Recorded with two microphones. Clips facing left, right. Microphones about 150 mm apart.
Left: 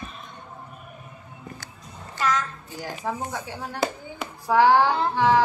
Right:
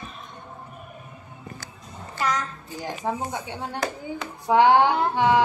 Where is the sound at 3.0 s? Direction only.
20° right (ahead or behind).